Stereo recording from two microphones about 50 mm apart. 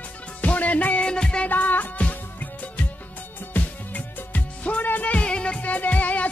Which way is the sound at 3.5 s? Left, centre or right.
Left.